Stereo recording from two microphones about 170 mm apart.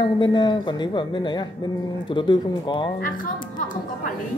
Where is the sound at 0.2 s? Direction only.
25° left (ahead or behind).